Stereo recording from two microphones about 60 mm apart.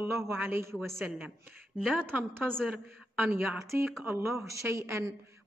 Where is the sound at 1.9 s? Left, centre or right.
Right.